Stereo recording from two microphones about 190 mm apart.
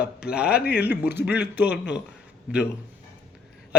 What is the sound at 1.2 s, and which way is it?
Speech, 60° left (ahead or behind).